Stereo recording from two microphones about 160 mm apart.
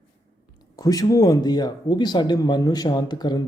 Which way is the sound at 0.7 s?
20° left (ahead or behind).